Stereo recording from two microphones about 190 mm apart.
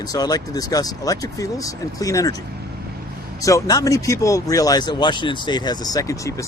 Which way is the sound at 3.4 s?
20° left (ahead or behind).